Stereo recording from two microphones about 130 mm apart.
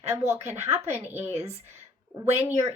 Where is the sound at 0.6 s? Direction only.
20° right (ahead or behind).